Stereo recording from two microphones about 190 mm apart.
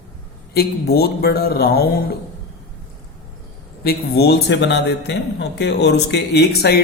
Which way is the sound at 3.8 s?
55° left (ahead or behind).